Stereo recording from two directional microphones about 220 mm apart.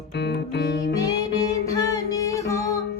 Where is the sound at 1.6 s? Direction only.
15° left (ahead or behind).